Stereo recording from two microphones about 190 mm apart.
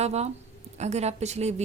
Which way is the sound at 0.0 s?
35° right (ahead or behind).